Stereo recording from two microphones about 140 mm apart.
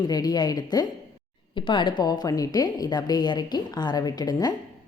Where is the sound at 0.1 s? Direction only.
30° left (ahead or behind).